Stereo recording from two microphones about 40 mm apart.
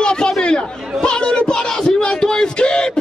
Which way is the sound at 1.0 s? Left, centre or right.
Left.